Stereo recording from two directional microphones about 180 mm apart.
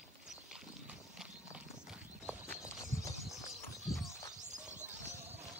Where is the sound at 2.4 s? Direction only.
15° left (ahead or behind).